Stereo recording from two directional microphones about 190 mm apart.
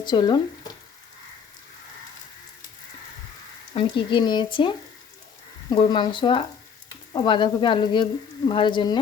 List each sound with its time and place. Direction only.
0.0 s speech: 25° left (ahead or behind)
3.8 s speech: 25° left (ahead or behind)
5.7 s speech: 25° left (ahead or behind)